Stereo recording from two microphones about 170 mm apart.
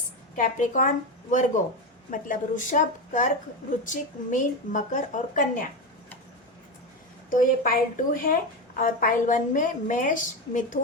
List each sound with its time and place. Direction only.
0.3 s a woman's voice: 50° left (ahead or behind)
7.3 s a woman's voice: 55° left (ahead or behind)